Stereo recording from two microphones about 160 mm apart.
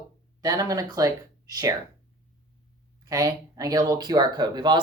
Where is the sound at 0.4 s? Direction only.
20° right (ahead or behind).